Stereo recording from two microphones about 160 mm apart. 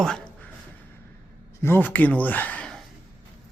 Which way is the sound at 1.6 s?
15° left (ahead or behind).